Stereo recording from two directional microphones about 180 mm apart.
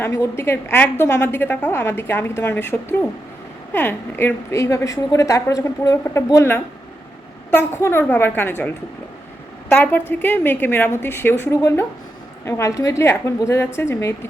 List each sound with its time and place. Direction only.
0.0 s a woman's voice: 15° left (ahead or behind)